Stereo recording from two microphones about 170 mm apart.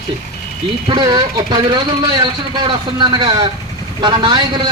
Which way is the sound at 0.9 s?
25° right (ahead or behind).